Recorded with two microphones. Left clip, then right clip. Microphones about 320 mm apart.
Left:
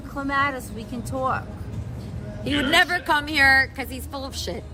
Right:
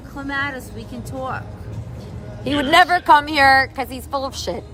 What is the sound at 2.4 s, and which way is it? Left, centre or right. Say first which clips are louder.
A woman's voice: right 5 dB; centre.